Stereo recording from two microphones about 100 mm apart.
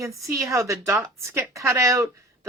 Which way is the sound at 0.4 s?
30° right (ahead or behind).